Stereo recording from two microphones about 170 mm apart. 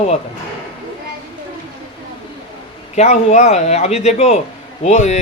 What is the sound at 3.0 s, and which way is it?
Speech, 40° left (ahead or behind).